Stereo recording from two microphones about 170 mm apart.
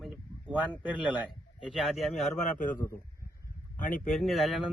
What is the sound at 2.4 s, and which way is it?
Speech, 50° left (ahead or behind).